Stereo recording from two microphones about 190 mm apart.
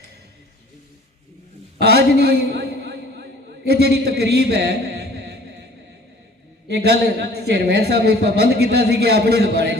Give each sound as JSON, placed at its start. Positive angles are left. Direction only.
{"t": 1.8, "sound": "a sound", "side_deg": -60}
{"t": 3.7, "sound": "a man's voice", "side_deg": -60}
{"t": 6.7, "sound": "a man's voice", "side_deg": -60}